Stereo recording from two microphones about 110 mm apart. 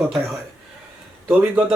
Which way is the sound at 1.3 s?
20° right (ahead or behind).